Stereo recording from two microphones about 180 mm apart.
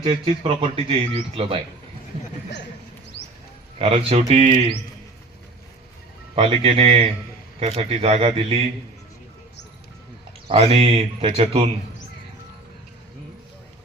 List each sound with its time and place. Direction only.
0.0 s a man's voice: 30° right (ahead or behind)
3.8 s speech: 30° right (ahead or behind)
6.3 s speech: 30° right (ahead or behind)
10.5 s speech: 35° right (ahead or behind)